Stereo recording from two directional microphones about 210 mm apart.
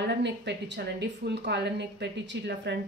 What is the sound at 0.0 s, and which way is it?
A woman's voice, 55° right (ahead or behind).